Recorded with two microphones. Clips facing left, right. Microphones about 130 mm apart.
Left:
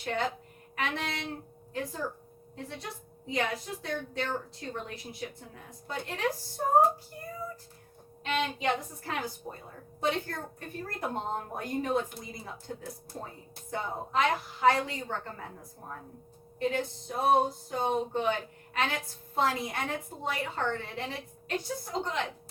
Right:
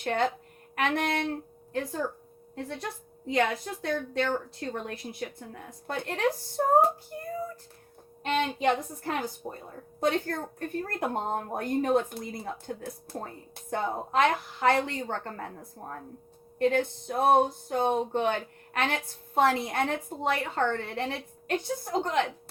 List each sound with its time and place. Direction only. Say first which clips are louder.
0.0 s a woman's voice: right 4 dB; 55° right (ahead or behind)
8.2 s a woman's voice: right 4 dB; 50° right (ahead or behind)